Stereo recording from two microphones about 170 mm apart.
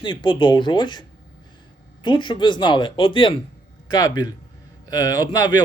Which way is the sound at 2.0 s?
30° left (ahead or behind).